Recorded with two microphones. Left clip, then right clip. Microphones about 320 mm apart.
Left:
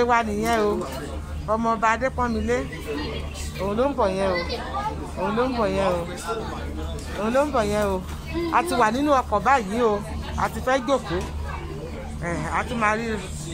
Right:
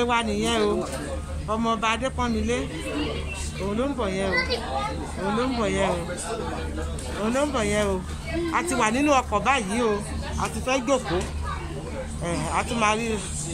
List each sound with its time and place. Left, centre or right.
0.0 s speech: centre
3.6 s speech: centre
5.6 s speech: centre
7.2 s speech: centre
12.3 s speech: centre